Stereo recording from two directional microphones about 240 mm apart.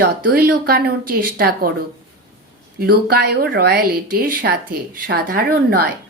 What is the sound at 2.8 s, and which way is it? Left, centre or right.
Speech, right.